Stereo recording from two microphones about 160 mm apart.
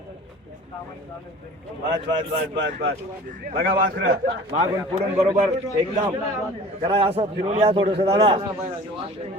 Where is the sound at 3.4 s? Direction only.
65° right (ahead or behind).